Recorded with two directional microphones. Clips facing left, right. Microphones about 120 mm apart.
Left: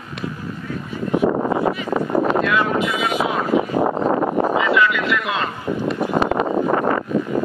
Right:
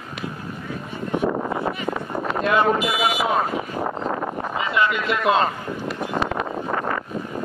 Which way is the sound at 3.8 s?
45° left (ahead or behind).